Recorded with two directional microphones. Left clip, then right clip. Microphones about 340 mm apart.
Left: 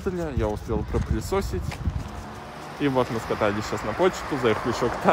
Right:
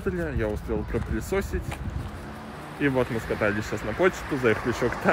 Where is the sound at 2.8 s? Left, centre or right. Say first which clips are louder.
Left 1 dB; centre.